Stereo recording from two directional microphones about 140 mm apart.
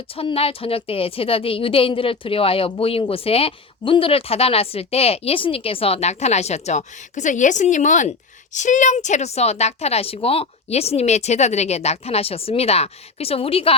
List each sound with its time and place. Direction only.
0.2 s a woman's voice: 45° left (ahead or behind)